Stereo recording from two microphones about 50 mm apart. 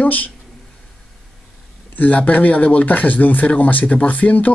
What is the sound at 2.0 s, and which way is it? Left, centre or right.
Speech, left.